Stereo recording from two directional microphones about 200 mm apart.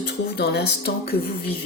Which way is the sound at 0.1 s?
55° left (ahead or behind).